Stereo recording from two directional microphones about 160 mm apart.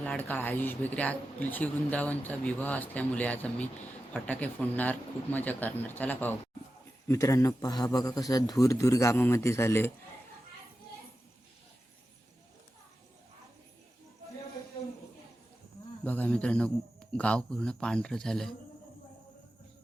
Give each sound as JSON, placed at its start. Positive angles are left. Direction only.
{"t": 0.0, "sound": "a man's voice", "side_deg": 10}
{"t": 16.0, "sound": "speech", "side_deg": 10}